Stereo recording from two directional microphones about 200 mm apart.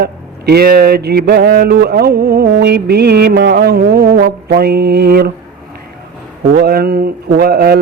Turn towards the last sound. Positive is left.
turn(degrees=-50)  # may be behind; listen again after turning